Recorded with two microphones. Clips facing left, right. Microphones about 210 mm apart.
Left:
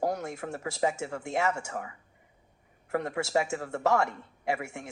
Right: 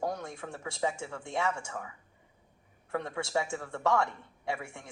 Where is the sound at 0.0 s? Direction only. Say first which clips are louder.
Left 4 dB; 70° left (ahead or behind).